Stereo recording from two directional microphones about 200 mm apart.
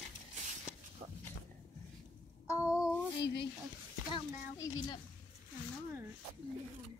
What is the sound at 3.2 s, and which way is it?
Speech, 60° left (ahead or behind).